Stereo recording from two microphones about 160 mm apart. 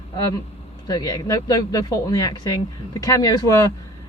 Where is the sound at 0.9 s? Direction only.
25° left (ahead or behind).